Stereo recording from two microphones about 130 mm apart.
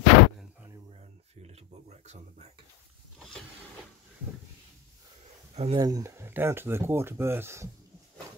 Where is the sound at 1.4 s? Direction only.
60° right (ahead or behind).